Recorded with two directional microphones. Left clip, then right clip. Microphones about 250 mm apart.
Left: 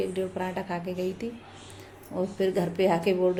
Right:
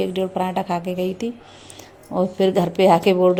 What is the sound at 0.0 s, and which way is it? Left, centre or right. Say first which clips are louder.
A woman's voice: right 8 dB; right.